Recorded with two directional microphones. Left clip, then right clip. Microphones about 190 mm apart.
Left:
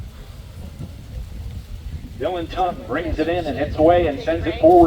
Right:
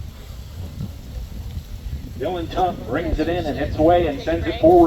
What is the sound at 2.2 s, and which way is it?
A man's voice, 50° left (ahead or behind).